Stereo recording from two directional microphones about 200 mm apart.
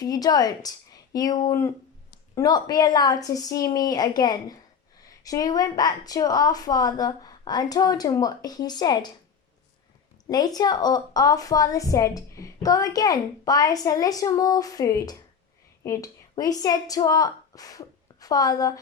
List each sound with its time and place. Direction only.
0.0 s a woman's voice: 20° left (ahead or behind)
10.2 s a woman's voice: 20° left (ahead or behind)